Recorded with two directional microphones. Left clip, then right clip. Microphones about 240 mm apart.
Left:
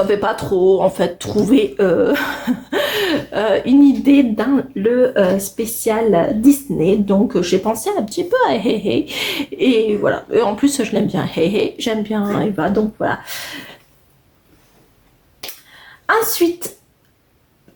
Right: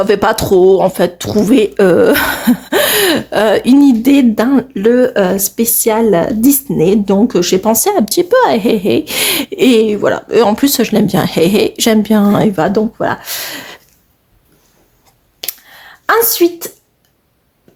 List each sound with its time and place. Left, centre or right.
0.1 s speech: right
16.0 s a woman's voice: right